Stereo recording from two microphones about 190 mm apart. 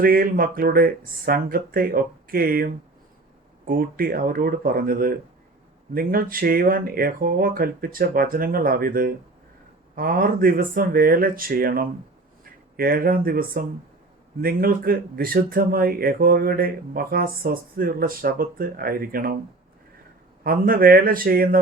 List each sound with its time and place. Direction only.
0.0 s speech: 50° right (ahead or behind)
20.4 s speech: 50° right (ahead or behind)